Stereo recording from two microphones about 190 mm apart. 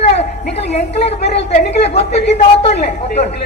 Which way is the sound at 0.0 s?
35° left (ahead or behind).